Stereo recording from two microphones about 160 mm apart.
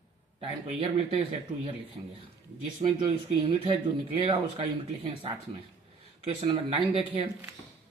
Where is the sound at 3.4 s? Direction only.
35° right (ahead or behind).